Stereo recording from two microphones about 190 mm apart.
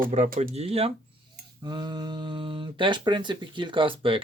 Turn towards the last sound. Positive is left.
turn(degrees=-25)  # may be behind; listen again after turning